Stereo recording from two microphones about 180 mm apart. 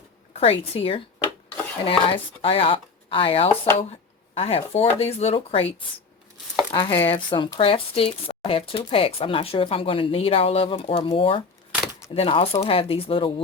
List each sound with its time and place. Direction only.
0.3 s speech: 35° left (ahead or behind)